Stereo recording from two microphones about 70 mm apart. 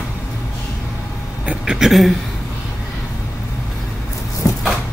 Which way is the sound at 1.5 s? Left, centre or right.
Centre.